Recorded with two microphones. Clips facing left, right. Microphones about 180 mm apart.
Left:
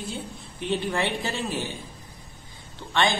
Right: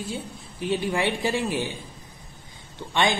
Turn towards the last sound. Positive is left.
turn(degrees=-15)  # may be behind; listen again after turning